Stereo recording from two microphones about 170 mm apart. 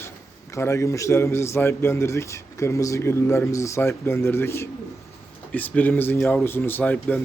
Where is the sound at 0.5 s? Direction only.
15° left (ahead or behind).